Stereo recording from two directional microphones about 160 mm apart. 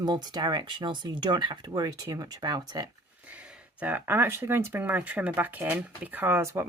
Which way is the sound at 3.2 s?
5° right (ahead or behind).